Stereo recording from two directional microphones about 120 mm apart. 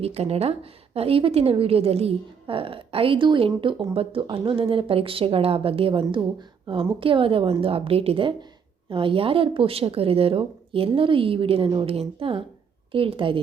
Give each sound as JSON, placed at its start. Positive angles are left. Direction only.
{"t": 0.0, "sound": "a woman's voice", "side_deg": -60}